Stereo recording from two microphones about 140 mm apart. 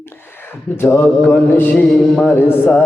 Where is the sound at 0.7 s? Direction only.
15° left (ahead or behind).